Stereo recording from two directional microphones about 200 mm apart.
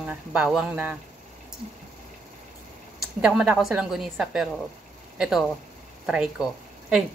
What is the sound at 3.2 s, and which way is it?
A woman's voice, 5° right (ahead or behind).